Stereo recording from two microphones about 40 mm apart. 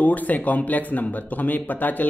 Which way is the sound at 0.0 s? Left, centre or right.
Left.